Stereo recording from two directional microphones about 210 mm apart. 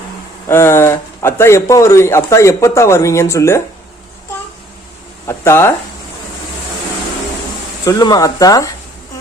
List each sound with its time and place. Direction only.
0.4 s speech: 10° left (ahead or behind)
5.3 s speech: 10° left (ahead or behind)
7.9 s speech: 15° left (ahead or behind)